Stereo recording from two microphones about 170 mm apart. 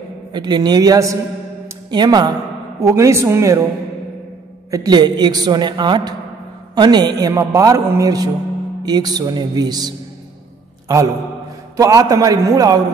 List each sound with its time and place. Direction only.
0.3 s a woman's voice: 25° right (ahead or behind)
4.6 s a woman's voice: 20° right (ahead or behind)
11.7 s a woman's voice: 20° right (ahead or behind)